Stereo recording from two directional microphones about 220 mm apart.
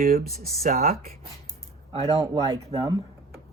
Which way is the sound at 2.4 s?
15° right (ahead or behind).